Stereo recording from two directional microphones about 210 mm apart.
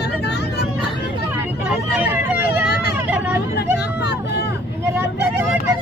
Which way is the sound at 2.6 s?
50° left (ahead or behind).